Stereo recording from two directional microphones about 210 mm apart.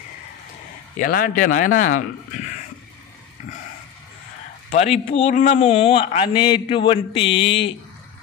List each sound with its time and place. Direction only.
0.9 s a man's voice: 45° left (ahead or behind)
4.6 s a man's voice: 30° left (ahead or behind)